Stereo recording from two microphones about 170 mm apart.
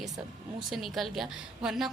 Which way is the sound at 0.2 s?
5° right (ahead or behind).